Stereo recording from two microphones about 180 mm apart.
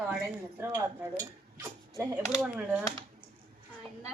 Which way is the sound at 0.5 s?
10° right (ahead or behind).